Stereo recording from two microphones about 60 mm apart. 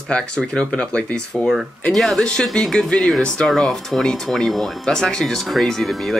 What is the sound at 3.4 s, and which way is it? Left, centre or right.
Speech, centre.